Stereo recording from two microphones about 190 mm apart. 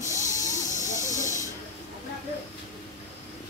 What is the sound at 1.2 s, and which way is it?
Hiss, 40° left (ahead or behind).